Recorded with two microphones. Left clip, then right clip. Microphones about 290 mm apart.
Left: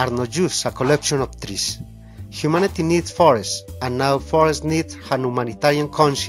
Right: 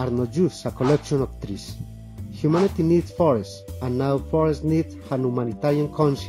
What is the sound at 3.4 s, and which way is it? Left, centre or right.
Speech, left.